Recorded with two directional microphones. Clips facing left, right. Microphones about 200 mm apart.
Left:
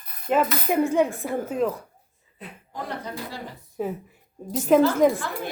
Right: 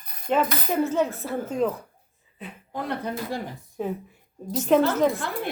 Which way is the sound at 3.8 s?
5° left (ahead or behind).